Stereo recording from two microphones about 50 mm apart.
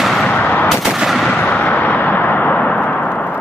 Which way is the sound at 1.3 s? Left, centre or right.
Left.